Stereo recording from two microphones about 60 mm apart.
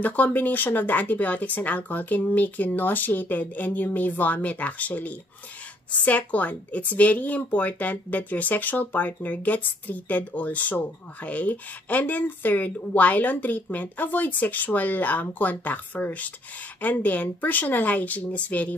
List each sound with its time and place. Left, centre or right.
0.0 s speech: left